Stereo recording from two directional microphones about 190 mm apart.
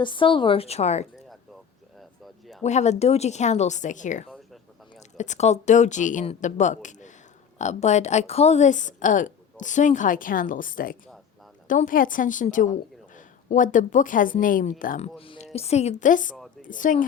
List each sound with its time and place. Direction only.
0.0 s a woman's voice: 25° left (ahead or behind)
2.6 s a woman's voice: 35° left (ahead or behind)
15.2 s a woman's voice: 30° left (ahead or behind)
16.3 s a sound: 5° left (ahead or behind)
16.6 s speech: 45° left (ahead or behind)